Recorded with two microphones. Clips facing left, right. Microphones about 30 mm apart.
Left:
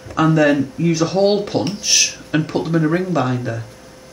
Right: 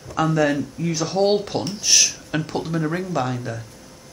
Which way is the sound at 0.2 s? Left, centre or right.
Left.